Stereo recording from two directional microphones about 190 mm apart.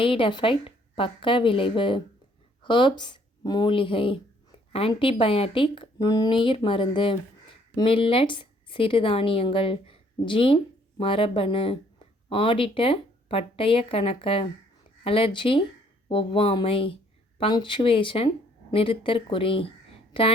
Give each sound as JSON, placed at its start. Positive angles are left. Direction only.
{"t": 0.0, "sound": "a woman's voice", "side_deg": 25}